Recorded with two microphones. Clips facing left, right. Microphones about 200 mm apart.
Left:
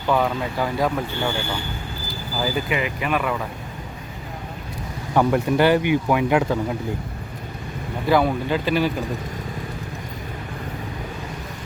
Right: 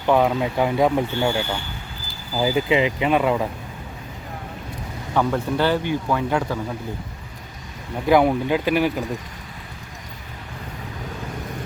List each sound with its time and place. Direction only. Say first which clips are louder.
0.0 s speech: right 3 dB; 15° right (ahead or behind)
2.4 s speech: right 5 dB; 20° right (ahead or behind)
5.1 s speech: left 3 dB; 10° left (ahead or behind)
8.1 s speech: right 3 dB; 15° right (ahead or behind)